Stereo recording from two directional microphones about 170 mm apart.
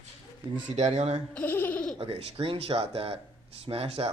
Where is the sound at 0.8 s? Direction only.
40° right (ahead or behind).